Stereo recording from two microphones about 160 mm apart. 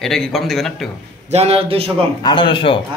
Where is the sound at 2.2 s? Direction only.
30° left (ahead or behind).